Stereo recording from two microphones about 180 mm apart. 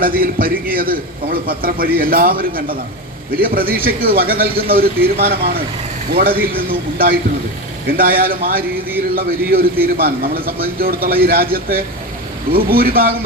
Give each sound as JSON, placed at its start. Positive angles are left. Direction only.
{"t": 0.0, "sound": "a man's voice", "side_deg": -55}